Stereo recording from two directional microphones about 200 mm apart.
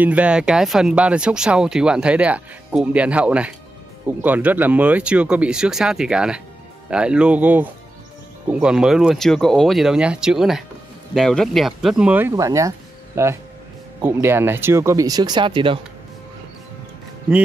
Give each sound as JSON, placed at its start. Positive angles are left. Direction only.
{"t": 0.0, "sound": "speech", "side_deg": -5}